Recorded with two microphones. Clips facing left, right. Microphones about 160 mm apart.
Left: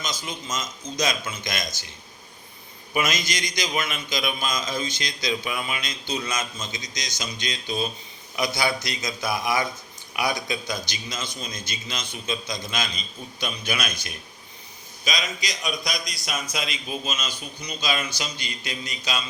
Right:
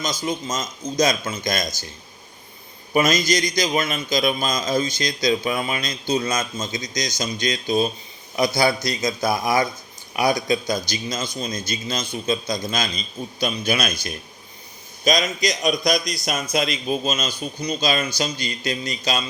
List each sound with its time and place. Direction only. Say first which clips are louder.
0.0 s a man's voice: right 7 dB; 40° right (ahead or behind)
2.9 s a man's voice: right 7 dB; 35° right (ahead or behind)